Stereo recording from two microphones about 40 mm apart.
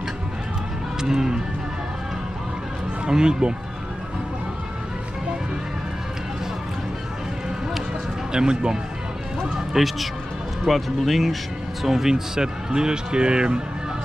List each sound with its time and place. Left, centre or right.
1.0 s speech: centre
3.1 s speech: centre
8.3 s speech: centre
9.8 s speech: centre; by 13.6 s right